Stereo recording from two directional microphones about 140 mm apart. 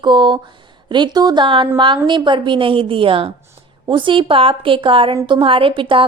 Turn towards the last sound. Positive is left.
turn(degrees=-40)  # may be behind; listen again after turning